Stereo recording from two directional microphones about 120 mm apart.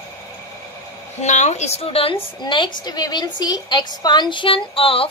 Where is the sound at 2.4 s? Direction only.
40° left (ahead or behind).